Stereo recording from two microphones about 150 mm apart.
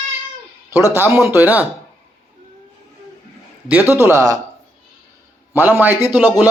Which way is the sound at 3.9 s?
15° right (ahead or behind).